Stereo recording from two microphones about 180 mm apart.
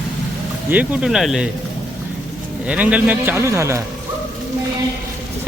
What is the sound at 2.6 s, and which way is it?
A man's voice, 5° right (ahead or behind).